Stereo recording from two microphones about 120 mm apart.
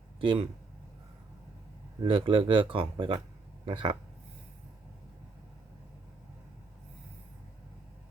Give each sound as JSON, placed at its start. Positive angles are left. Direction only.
{"t": 0.2, "sound": "speech", "side_deg": -45}
{"t": 2.0, "sound": "speech", "side_deg": -45}